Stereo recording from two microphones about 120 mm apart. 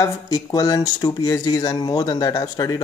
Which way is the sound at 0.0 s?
30° left (ahead or behind).